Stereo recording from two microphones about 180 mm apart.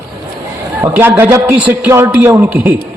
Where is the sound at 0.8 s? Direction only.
10° right (ahead or behind).